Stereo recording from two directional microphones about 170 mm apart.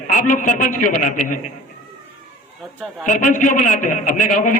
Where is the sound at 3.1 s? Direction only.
50° left (ahead or behind).